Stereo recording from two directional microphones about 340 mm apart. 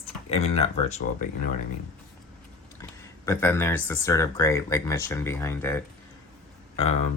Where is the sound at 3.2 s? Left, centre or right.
Centre.